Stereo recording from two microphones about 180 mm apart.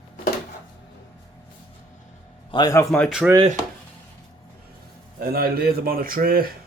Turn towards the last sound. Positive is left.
turn(degrees=-55)  # may be behind; listen again after turning